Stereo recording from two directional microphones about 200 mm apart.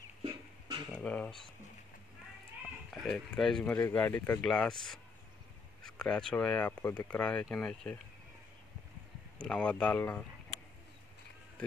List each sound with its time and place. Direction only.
0.2 s a sound: 25° right (ahead or behind)
0.9 s speech: 5° left (ahead or behind)
2.9 s speech: centre (ahead or behind)
9.4 s speech: 5° left (ahead or behind)